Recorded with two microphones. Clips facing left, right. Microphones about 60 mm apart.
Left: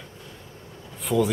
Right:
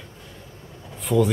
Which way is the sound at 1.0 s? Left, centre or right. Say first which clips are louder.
Right 2 dB; centre.